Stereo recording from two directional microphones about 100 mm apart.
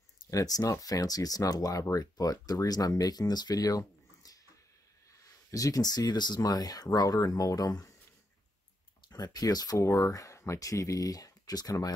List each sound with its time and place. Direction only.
0.3 s speech: 35° left (ahead or behind)
5.5 s speech: 35° left (ahead or behind)
9.1 s speech: 40° left (ahead or behind)